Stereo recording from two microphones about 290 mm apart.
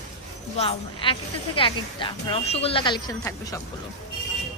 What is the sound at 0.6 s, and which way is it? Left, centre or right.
A woman's voice, centre.